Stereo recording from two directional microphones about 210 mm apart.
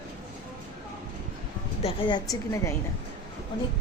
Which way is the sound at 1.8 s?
20° left (ahead or behind).